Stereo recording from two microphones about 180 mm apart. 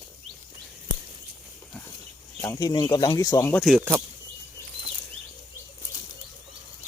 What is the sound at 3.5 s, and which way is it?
Speech, centre (ahead or behind).